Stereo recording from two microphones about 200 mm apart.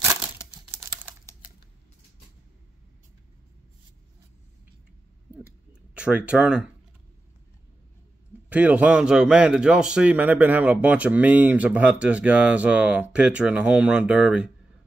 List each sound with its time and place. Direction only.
0.0 s crumpling: 15° right (ahead or behind)
5.9 s a man's voice: 5° right (ahead or behind)
8.5 s a man's voice: 10° right (ahead or behind)